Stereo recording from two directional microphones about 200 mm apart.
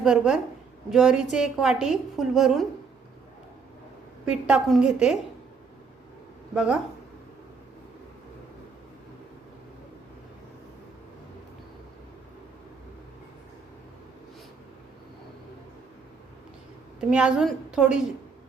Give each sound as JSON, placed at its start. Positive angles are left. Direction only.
{"t": 0.0, "sound": "a woman's voice", "side_deg": 0}
{"t": 4.3, "sound": "a woman's voice", "side_deg": -5}
{"t": 6.5, "sound": "a woman's voice", "side_deg": -5}
{"t": 17.0, "sound": "a woman's voice", "side_deg": -5}